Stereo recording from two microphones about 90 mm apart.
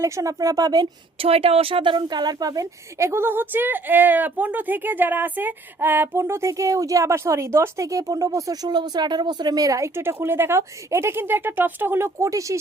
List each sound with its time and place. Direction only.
0.0 s a woman's voice: 40° right (ahead or behind)
1.2 s a woman's voice: 90° right; by 12.5 s 35° right (ahead or behind)